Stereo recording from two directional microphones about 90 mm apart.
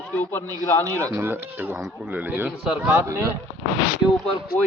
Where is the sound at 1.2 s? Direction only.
25° right (ahead or behind).